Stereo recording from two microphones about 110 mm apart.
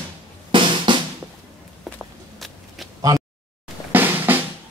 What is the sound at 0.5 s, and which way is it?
Drum, 50° right (ahead or behind).